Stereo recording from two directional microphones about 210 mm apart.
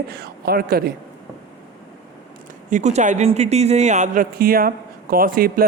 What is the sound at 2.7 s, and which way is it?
A woman's voice, 35° right (ahead or behind).